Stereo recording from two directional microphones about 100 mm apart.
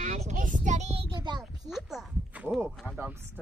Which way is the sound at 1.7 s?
Centre (ahead or behind).